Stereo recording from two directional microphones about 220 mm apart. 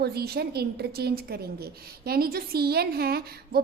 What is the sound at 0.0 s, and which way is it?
A woman's voice, 45° right (ahead or behind).